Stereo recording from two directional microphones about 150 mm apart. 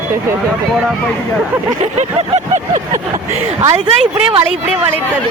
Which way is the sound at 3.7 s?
35° right (ahead or behind).